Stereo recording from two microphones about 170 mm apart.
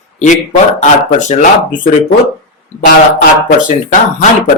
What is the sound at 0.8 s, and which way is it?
Speech, 45° left (ahead or behind).